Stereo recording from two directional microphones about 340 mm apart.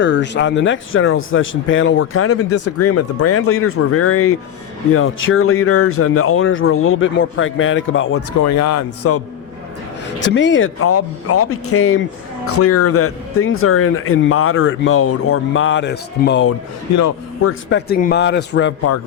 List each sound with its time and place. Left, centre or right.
0.0 s speech: left
8.4 s a man's voice: left
10.2 s speech: left
16.9 s a man's voice: left
17.7 s speech: left